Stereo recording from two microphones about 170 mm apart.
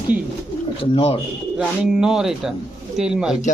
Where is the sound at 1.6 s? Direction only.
5° right (ahead or behind).